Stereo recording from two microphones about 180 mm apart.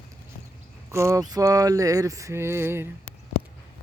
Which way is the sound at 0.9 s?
15° right (ahead or behind).